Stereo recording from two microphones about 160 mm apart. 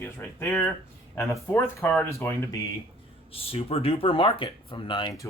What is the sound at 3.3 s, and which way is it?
Speech, 35° left (ahead or behind).